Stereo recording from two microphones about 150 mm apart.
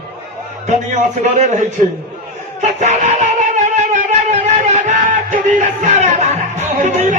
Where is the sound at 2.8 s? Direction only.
50° right (ahead or behind).